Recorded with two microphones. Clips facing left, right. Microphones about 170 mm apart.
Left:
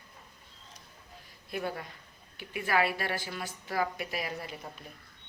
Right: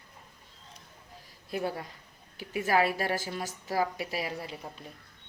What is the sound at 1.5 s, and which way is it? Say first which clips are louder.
A woman's voice: right 2 dB; 35° right (ahead or behind).